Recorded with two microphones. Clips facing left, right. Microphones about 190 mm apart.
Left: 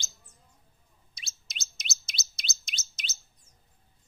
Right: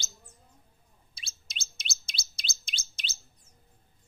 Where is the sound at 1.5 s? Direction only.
30° right (ahead or behind).